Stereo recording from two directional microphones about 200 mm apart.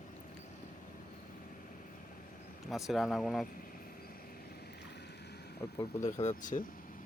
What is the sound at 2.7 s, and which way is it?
Speech, centre (ahead or behind).